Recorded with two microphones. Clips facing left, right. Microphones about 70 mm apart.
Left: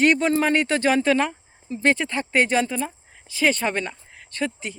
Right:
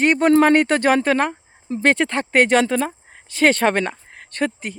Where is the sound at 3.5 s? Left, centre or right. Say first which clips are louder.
Right 7 dB; right.